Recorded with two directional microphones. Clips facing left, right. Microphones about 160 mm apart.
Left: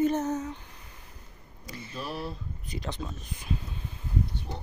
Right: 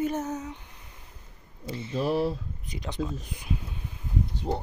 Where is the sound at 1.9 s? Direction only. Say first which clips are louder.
Right 10 dB; 90° right.